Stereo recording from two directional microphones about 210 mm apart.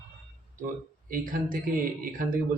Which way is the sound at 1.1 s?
40° right (ahead or behind).